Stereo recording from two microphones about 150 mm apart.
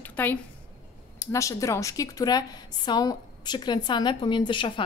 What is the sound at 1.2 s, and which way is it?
A woman's voice, 20° left (ahead or behind).